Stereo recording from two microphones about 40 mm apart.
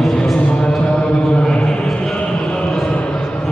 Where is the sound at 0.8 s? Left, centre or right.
Left.